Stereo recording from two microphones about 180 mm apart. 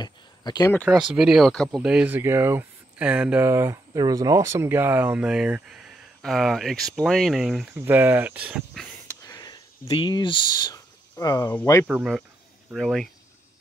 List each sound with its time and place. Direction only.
0.0 s a sound: 25° left (ahead or behind)
1.1 s speech: 5° right (ahead or behind)
7.7 s speech: 10° right (ahead or behind)
9.0 s a sound: 20° left (ahead or behind)
11.4 s speech: 15° left (ahead or behind)
11.9 s speech: 5° right (ahead or behind)